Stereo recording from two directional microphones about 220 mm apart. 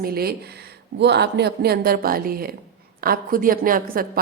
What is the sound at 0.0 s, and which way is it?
A woman's voice, 45° right (ahead or behind).